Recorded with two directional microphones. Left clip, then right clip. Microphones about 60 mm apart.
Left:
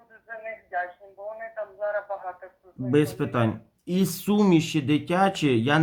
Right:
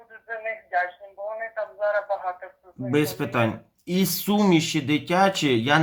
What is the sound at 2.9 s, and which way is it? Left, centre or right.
Speech, left.